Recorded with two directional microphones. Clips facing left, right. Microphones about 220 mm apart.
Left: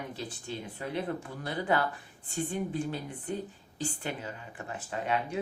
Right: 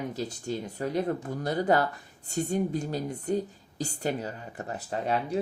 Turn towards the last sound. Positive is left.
turn(degrees=-35)  # may be behind; listen again after turning